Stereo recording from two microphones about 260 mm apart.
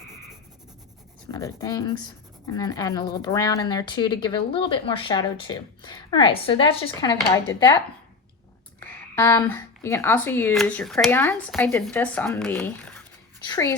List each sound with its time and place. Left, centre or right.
1.3 s speech: centre
9.1 s speech: centre